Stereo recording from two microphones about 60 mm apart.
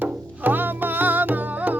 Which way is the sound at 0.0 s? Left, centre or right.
Right.